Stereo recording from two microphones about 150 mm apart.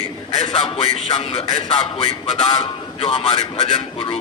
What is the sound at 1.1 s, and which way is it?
A man's voice, 40° left (ahead or behind).